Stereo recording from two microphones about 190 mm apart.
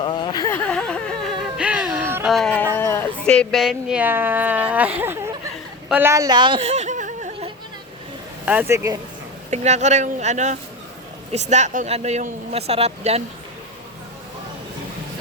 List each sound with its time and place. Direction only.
0.0 s a sound: 25° left (ahead or behind)
0.5 s music: 10° left (ahead or behind); by 2.3 s 10° right (ahead or behind)
2.7 s speech: 15° left (ahead or behind); by 5.3 s 10° right (ahead or behind)
5.9 s a sound: 10° right (ahead or behind); by 7.3 s 40° right (ahead or behind)
8.4 s speech: 10° right (ahead or behind)
9.5 s speech: 35° right (ahead or behind)